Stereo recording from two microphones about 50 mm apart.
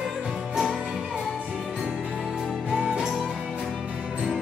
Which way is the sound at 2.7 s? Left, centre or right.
Right.